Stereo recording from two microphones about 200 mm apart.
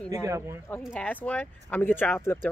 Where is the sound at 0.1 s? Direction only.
15° right (ahead or behind).